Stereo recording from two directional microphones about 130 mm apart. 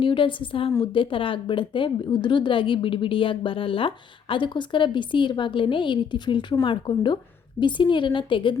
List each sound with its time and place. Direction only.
0.0 s a woman's voice: 40° left (ahead or behind)